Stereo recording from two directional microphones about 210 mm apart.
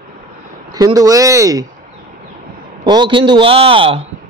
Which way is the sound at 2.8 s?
20° right (ahead or behind).